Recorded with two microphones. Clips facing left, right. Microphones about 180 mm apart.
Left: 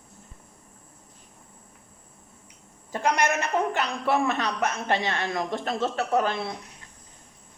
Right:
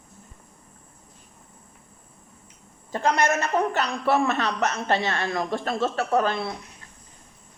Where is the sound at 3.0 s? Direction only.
15° left (ahead or behind).